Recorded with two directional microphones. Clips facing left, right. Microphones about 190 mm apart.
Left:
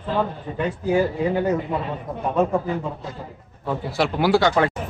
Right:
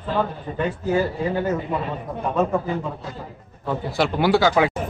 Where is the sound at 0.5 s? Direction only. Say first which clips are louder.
Left 1 dB; 15° left (ahead or behind).